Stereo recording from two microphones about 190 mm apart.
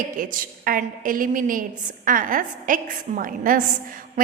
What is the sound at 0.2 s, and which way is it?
A woman's voice, 45° right (ahead or behind).